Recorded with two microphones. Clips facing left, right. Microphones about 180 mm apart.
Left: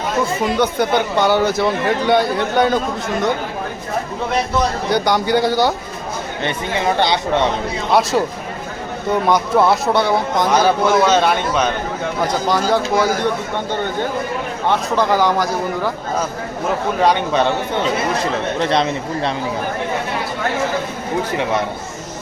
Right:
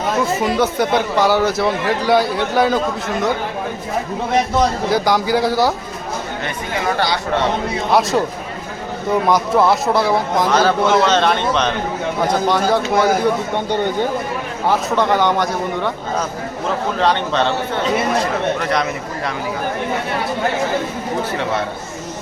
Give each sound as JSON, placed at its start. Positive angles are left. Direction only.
{"t": 0.5, "sound": "a man's voice", "side_deg": 0}
{"t": 4.9, "sound": "a man's voice", "side_deg": 0}
{"t": 6.4, "sound": "speech", "side_deg": 25}
{"t": 7.9, "sound": "a man's voice", "side_deg": 0}
{"t": 9.2, "sound": "a man's voice", "side_deg": 0}
{"t": 10.5, "sound": "a man's voice", "side_deg": 15}
{"t": 14.7, "sound": "a man's voice", "side_deg": 0}
{"t": 17.0, "sound": "speech", "side_deg": 10}
{"t": 18.6, "sound": "speech", "side_deg": 25}